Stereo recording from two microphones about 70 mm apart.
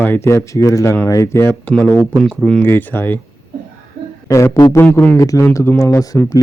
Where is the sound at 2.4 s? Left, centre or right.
Centre.